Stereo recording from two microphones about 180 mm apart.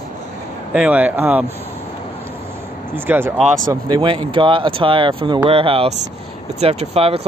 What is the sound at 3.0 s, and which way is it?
Speech, 10° right (ahead or behind).